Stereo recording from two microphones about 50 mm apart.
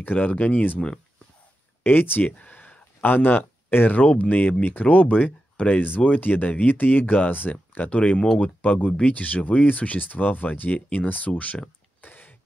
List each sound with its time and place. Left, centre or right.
0.0 s speech: left
1.8 s speech: left
4.0 s speech: left
7.9 s speech: left
12.0 s a sound: left